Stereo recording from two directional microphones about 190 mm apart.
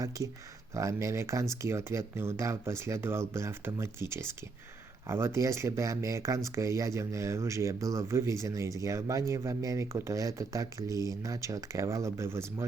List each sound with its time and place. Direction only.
0.7 s speech: 15° right (ahead or behind)